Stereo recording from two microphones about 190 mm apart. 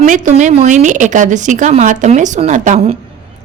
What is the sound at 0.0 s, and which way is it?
Speech, 40° right (ahead or behind).